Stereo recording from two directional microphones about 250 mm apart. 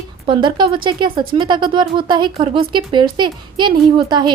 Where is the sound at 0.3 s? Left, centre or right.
Centre.